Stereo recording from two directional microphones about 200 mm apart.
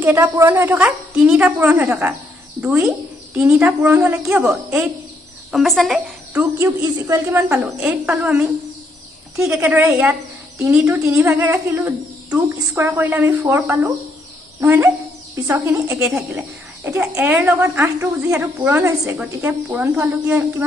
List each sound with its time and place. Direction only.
0.0 s a child's voice: 10° right (ahead or behind)